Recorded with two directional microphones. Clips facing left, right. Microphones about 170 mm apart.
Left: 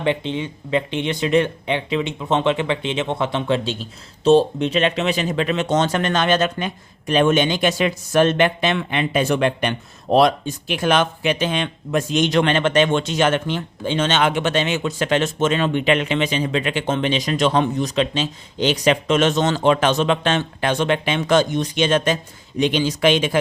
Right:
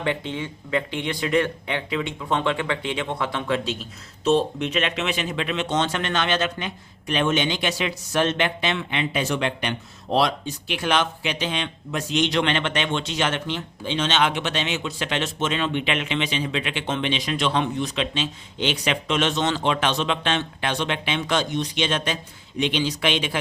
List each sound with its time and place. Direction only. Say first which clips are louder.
0.0 s speech: left 5 dB; 20° left (ahead or behind); by 23.4 s 45° left (ahead or behind)